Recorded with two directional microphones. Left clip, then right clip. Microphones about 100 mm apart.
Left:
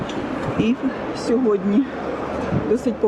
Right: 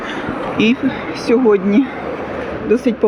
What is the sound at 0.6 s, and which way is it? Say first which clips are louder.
Speech: right 8 dB; 10° right (ahead or behind).